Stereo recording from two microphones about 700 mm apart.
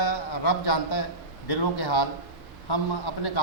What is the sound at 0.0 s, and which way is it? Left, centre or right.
A man's voice, left.